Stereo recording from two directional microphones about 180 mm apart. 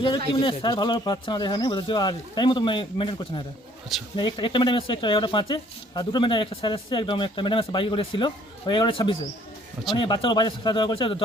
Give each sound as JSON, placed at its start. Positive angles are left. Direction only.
{"t": 0.4, "sound": "speech", "side_deg": 25}